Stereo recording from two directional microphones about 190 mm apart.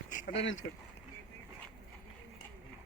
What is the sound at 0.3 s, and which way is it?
Speech, 80° left.